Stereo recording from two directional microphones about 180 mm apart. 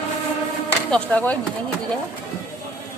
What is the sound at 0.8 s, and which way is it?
Speech, 5° left (ahead or behind).